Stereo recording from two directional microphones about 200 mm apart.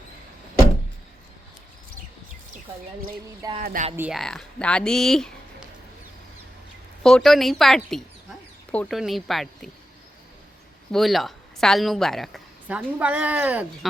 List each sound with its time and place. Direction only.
3.6 s speech: 45° right (ahead or behind)
3.9 s speech: 10° right (ahead or behind)
4.2 s speech: 5° left (ahead or behind)
7.0 s a woman's voice: centre (ahead or behind)
10.9 s a woman's voice: centre (ahead or behind)